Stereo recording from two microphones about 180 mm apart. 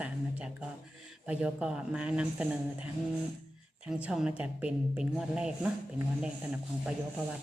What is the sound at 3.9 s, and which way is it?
Speech, 5° right (ahead or behind).